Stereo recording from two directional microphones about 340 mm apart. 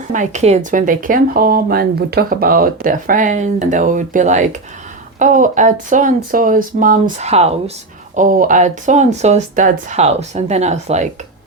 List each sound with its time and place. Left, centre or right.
0.1 s speech: right